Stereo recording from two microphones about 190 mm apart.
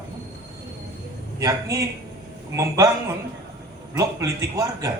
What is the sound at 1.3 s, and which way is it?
Speech, 15° right (ahead or behind).